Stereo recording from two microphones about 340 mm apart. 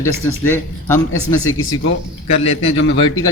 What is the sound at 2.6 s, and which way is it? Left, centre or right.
Speech, left.